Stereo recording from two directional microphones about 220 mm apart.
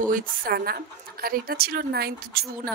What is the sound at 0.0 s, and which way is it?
Speech, 40° right (ahead or behind).